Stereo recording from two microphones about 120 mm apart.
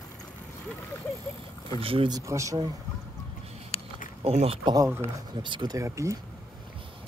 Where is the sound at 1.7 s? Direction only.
50° right (ahead or behind).